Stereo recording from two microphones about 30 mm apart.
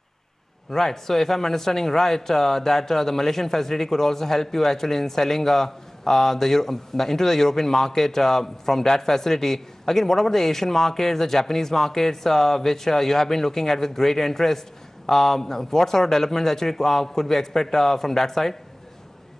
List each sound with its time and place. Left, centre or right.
0.7 s a man's voice: centre